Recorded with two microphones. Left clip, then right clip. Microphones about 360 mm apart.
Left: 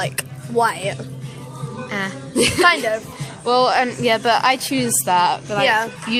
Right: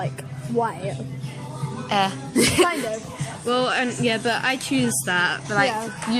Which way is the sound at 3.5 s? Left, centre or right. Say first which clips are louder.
Left 6 dB; centre.